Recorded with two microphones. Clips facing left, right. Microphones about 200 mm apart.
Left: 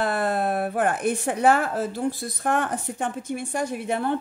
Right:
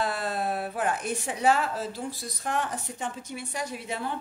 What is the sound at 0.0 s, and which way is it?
Speech, 55° left (ahead or behind).